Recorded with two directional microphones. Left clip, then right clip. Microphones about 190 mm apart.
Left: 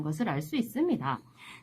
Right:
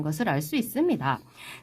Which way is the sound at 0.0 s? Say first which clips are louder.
Right 5 dB; 30° right (ahead or behind).